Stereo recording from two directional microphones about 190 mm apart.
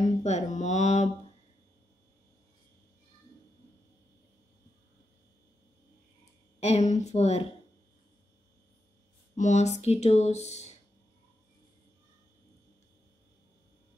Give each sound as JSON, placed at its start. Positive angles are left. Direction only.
{"t": 0.2, "sound": "speech", "side_deg": 40}
{"t": 6.6, "sound": "speech", "side_deg": 35}
{"t": 9.3, "sound": "speech", "side_deg": 40}